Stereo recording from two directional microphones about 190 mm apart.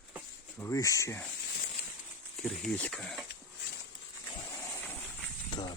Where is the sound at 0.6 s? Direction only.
15° left (ahead or behind).